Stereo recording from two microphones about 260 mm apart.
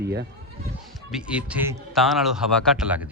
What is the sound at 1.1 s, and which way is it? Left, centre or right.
A man's voice, centre.